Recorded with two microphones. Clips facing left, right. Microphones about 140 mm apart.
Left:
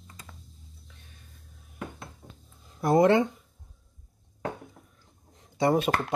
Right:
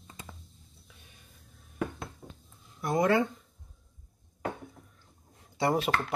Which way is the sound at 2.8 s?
30° left (ahead or behind).